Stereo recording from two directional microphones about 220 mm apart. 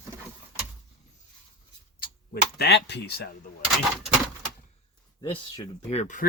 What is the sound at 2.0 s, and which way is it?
Speech, 45° left (ahead or behind).